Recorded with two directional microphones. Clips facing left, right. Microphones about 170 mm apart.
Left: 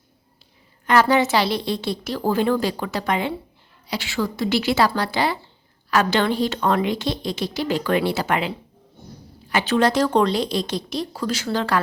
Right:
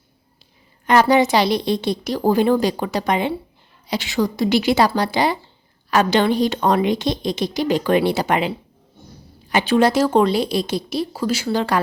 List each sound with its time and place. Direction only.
0.9 s a woman's voice: 15° right (ahead or behind)